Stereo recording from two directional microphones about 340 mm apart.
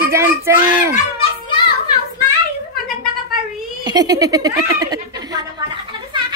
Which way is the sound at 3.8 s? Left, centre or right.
Centre.